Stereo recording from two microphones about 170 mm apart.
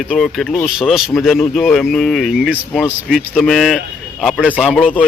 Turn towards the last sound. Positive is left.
turn(degrees=5)  # may be behind; listen again after turning